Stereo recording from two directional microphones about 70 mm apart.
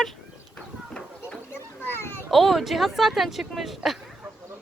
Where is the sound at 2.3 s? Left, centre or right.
Centre.